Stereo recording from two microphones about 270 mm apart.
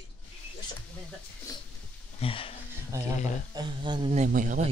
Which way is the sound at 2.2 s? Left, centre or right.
Left.